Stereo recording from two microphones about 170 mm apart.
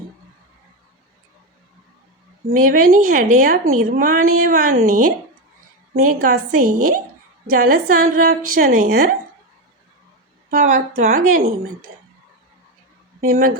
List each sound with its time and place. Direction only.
2.6 s a woman's voice: 55° right (ahead or behind)
10.5 s speech: 50° right (ahead or behind)